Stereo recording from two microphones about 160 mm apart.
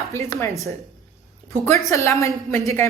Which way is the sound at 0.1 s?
15° left (ahead or behind).